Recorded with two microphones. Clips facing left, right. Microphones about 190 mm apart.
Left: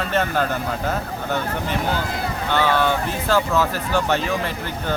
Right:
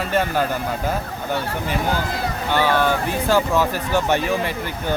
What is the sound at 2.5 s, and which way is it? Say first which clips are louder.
Speech: right 1 dB; 10° right (ahead or behind).